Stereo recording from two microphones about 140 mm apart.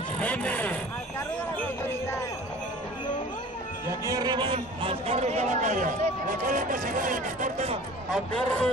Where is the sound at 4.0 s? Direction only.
25° right (ahead or behind); by 5.9 s 60° right (ahead or behind).